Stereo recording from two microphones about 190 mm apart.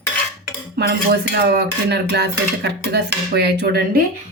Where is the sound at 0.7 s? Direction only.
60° right (ahead or behind).